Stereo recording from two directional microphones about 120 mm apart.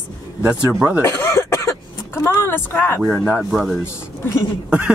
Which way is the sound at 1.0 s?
25° left (ahead or behind).